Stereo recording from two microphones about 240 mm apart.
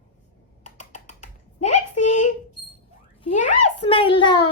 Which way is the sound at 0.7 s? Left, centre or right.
Left.